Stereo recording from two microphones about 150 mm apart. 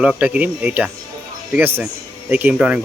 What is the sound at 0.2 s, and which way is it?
Speech, 10° right (ahead or behind).